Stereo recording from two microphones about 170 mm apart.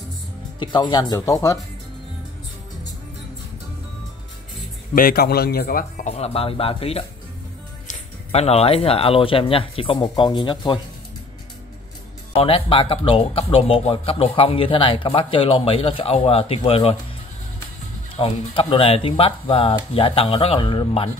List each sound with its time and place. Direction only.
0.6 s speech: 25° left (ahead or behind)
4.9 s a man's voice: 60° left (ahead or behind)
6.0 s speech: 40° left (ahead or behind)
12.4 s speech: 35° left (ahead or behind)
18.1 s speech: 35° left (ahead or behind)